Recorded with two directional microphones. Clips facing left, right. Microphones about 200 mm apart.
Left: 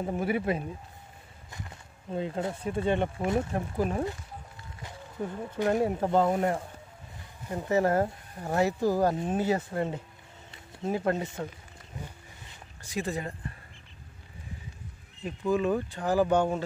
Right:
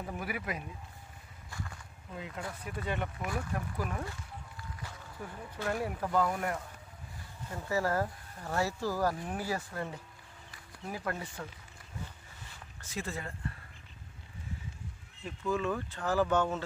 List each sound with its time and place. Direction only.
0.0 s speech: 25° left (ahead or behind)
12.0 s a sound: 15° left (ahead or behind)
15.2 s speech: 15° left (ahead or behind)